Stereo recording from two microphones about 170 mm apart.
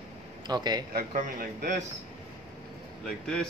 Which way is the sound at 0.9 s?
60° right (ahead or behind).